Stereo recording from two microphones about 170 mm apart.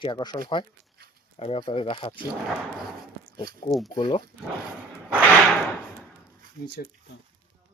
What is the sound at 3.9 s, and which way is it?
Speech, 25° left (ahead or behind).